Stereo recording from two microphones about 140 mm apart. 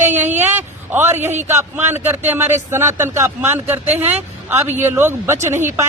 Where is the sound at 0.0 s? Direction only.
60° right (ahead or behind).